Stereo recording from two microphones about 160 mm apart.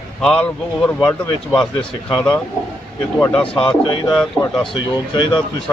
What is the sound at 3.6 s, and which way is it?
Speech, 30° left (ahead or behind).